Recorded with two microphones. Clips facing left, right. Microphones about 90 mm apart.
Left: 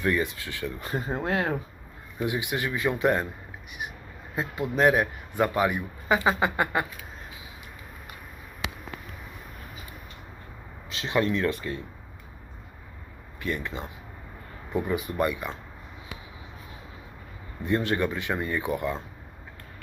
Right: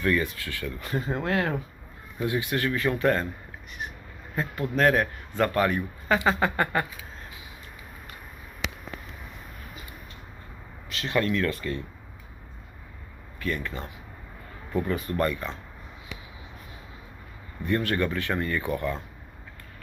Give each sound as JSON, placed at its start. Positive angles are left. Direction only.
{"t": 0.0, "sound": "a man's voice", "side_deg": 20}
{"t": 3.7, "sound": "crow", "side_deg": 10}
{"t": 4.4, "sound": "a man's voice", "side_deg": 15}
{"t": 10.8, "sound": "speech", "side_deg": 20}
{"t": 13.4, "sound": "a man's voice", "side_deg": 20}
{"t": 17.7, "sound": "a man's voice", "side_deg": 20}